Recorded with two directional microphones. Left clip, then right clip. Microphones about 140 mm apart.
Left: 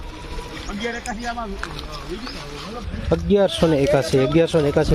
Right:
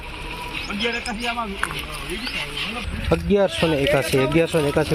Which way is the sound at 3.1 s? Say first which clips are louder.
Left 1 dB; 25° left (ahead or behind).